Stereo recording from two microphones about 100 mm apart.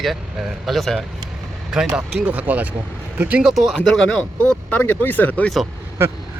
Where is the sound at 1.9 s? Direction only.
10° right (ahead or behind); by 5.5 s 15° left (ahead or behind).